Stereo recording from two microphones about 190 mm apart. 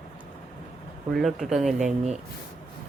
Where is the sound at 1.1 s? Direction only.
Centre (ahead or behind).